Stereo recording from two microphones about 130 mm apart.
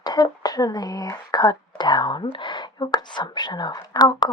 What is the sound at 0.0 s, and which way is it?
Speech, 30° left (ahead or behind).